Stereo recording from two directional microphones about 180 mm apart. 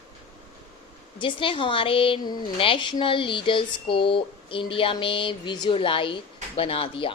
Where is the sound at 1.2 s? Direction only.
30° left (ahead or behind).